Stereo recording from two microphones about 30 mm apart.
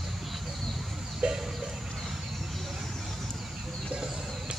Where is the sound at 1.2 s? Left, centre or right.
Right.